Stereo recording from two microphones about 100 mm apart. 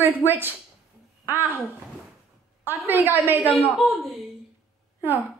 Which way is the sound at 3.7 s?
Centre (ahead or behind).